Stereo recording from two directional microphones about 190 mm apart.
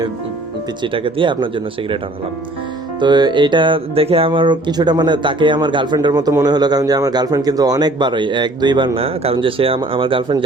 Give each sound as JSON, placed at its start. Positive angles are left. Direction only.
{"t": 0.8, "sound": "speech", "side_deg": -25}
{"t": 3.0, "sound": "speech", "side_deg": -25}